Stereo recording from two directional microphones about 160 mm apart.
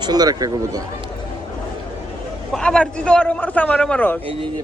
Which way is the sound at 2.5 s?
5° left (ahead or behind).